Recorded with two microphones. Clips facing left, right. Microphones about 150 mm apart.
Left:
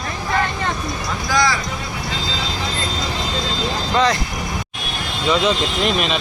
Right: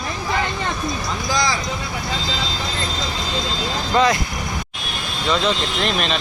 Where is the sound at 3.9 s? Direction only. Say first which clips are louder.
Right 1 dB; 15° right (ahead or behind).